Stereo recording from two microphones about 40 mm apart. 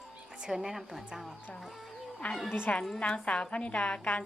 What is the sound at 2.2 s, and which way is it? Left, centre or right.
A woman's voice, left.